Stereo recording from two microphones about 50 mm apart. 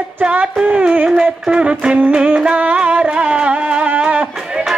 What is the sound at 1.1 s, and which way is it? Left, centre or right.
Music, centre.